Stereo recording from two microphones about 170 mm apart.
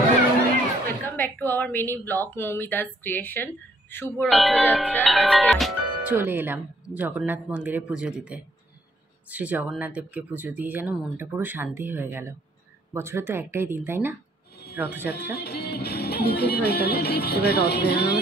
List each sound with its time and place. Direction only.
0.8 s a woman's voice: 10° left (ahead or behind)
4.3 s speech: centre (ahead or behind)
6.1 s speech: 10° right (ahead or behind)
15.3 s music: 70° left (ahead or behind)